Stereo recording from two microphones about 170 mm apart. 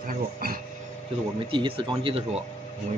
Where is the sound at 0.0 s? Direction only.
60° right (ahead or behind).